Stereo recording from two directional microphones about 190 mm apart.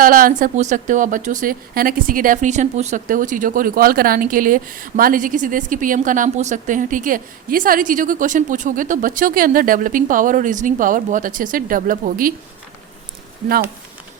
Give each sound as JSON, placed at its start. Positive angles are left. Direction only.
{"t": 0.0, "sound": "speech", "side_deg": -45}